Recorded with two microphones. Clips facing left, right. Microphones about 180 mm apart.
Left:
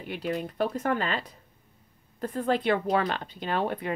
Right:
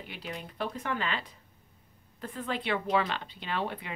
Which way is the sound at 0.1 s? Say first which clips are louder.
Left 12 dB; 50° left (ahead or behind).